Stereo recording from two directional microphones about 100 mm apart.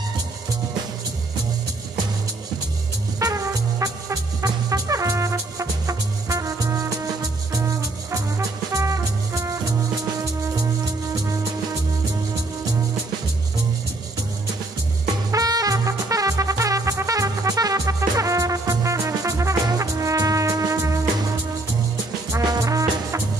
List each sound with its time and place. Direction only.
3.2 s music: 35° right (ahead or behind)
15.3 s music: 40° right (ahead or behind)
22.4 s music: 40° right (ahead or behind)